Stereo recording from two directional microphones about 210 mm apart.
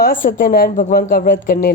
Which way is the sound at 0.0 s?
40° left (ahead or behind).